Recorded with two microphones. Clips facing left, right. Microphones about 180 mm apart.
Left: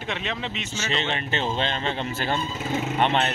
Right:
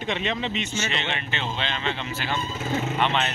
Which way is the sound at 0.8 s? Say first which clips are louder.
Left 2 dB; 40° left (ahead or behind).